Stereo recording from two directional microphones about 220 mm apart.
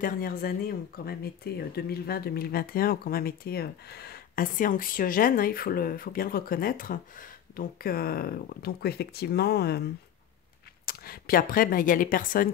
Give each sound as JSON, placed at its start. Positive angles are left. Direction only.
{"t": 0.0, "sound": "speech", "side_deg": 40}
{"t": 10.9, "sound": "speech", "side_deg": 40}